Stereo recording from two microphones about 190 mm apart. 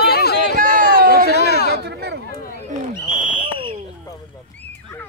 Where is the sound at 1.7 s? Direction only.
60° right (ahead or behind).